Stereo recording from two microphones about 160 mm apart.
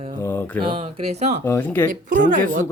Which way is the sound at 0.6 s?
30° right (ahead or behind).